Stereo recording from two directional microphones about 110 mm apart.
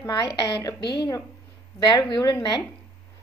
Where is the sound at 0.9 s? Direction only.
40° left (ahead or behind).